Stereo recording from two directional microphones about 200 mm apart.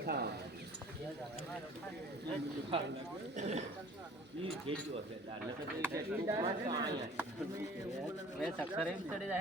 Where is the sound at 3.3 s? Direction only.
35° right (ahead or behind).